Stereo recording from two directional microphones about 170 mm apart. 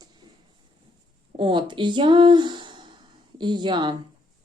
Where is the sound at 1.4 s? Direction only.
30° right (ahead or behind).